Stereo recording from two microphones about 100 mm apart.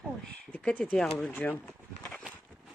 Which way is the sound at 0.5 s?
15° left (ahead or behind).